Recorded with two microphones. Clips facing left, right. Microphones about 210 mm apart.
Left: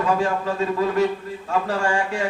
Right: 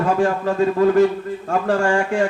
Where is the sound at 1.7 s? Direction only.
50° right (ahead or behind).